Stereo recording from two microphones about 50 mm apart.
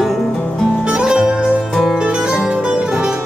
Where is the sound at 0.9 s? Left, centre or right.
Centre.